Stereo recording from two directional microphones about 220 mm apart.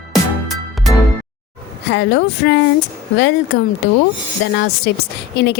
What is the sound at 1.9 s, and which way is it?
A woman's voice, 55° left (ahead or behind).